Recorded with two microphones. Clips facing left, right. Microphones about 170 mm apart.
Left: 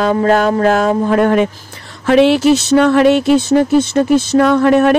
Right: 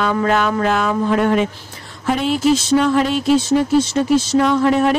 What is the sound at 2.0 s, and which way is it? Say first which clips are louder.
Speech: left 7 dB; 80° left.